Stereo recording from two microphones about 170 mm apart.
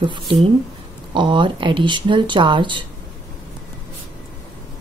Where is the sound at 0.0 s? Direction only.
30° right (ahead or behind).